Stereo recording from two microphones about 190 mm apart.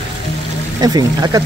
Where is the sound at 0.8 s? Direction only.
20° right (ahead or behind).